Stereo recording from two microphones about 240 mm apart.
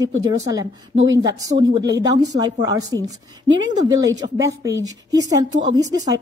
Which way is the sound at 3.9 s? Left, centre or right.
Centre.